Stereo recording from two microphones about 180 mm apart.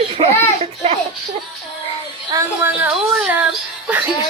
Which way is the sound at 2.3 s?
10° right (ahead or behind).